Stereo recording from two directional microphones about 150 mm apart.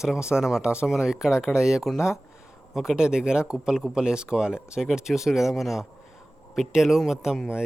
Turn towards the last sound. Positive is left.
turn(degrees=-5)  # may be behind; listen again after turning